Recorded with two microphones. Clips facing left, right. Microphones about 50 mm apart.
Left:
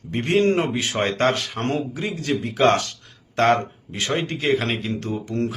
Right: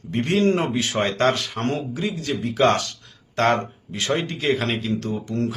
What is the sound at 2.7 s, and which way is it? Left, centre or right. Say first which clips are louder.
Speech: left 1 dB; left.